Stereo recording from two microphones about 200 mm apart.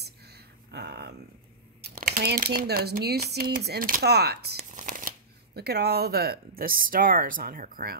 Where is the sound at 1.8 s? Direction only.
45° right (ahead or behind).